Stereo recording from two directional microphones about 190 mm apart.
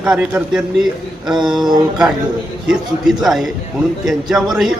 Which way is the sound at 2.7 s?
Centre (ahead or behind).